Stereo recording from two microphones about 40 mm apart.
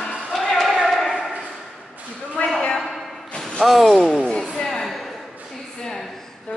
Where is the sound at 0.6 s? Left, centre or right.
Centre.